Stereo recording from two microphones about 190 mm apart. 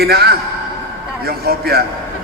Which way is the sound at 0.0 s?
55° right (ahead or behind).